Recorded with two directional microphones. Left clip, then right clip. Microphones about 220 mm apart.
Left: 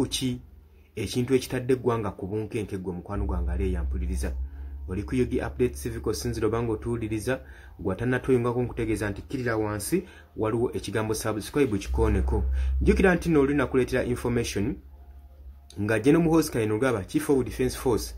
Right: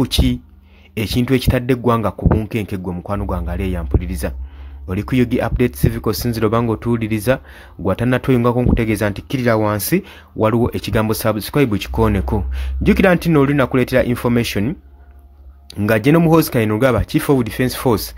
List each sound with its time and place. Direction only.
0.0 s speech: 45° right (ahead or behind)